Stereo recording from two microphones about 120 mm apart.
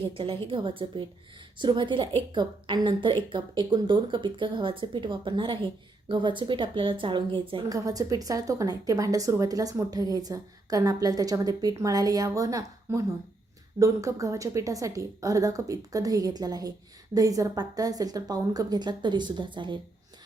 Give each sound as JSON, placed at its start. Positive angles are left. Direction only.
{"t": 0.0, "sound": "speech", "side_deg": -50}
{"t": 7.7, "sound": "a woman's voice", "side_deg": -30}